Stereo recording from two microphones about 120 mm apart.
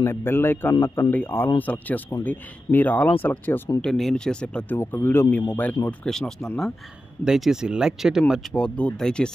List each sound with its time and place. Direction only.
0.0 s a man's voice: 20° left (ahead or behind)
3.8 s speech: 5° left (ahead or behind)
4.7 s a man's voice: 20° left (ahead or behind); by 8.5 s 5° right (ahead or behind)
8.5 s speech: 10° left (ahead or behind)